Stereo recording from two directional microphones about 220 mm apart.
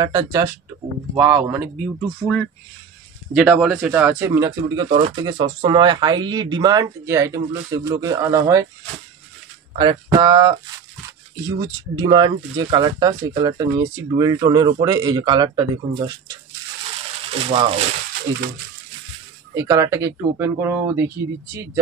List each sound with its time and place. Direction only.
0.0 s speech: 15° right (ahead or behind)
3.3 s speech: 5° right (ahead or behind)
9.8 s speech: 20° right (ahead or behind)
12.0 s speech: 20° right (ahead or behind)
17.3 s speech: 25° right (ahead or behind)
19.5 s speech: 15° right (ahead or behind)